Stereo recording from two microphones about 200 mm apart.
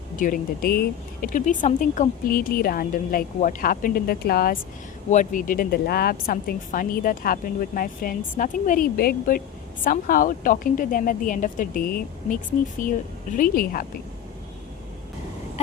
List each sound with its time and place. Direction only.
0.2 s speech: 45° left (ahead or behind)